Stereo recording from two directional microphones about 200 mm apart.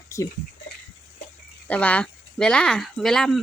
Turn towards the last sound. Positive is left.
turn(degrees=0)  # may be behind; listen again after turning